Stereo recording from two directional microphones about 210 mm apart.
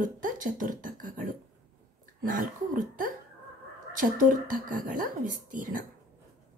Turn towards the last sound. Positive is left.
turn(degrees=-40)  # may be behind; listen again after turning